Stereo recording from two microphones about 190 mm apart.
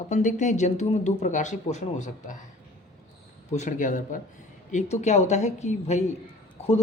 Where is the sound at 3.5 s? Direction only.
40° left (ahead or behind).